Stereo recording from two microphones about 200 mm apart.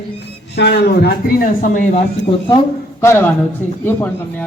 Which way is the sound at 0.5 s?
55° left (ahead or behind).